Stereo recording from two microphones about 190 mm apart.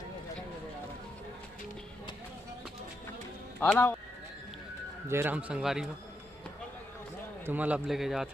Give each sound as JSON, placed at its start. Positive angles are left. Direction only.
{"t": 3.6, "sound": "speech", "side_deg": 10}
{"t": 5.0, "sound": "a man's voice", "side_deg": -10}
{"t": 7.4, "sound": "a man's voice", "side_deg": -10}